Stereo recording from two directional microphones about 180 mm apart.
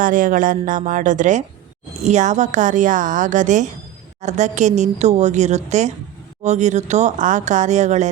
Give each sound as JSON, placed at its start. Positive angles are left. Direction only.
{"t": 0.0, "sound": "a woman's voice", "side_deg": -50}